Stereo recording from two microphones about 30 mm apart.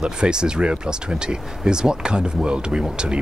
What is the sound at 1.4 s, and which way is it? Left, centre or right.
Speech, centre.